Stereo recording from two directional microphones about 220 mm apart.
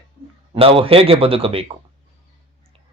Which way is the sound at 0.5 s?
25° right (ahead or behind).